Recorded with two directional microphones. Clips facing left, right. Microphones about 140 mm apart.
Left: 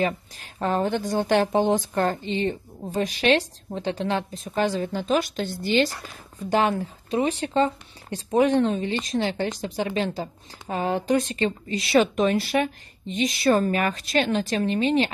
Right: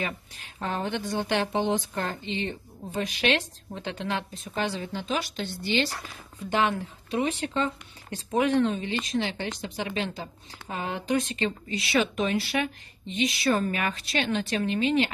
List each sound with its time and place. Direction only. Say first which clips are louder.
0.0 s a woman's voice: left 8 dB; 40° left (ahead or behind)
6.5 s speech: left 4 dB; 35° left (ahead or behind)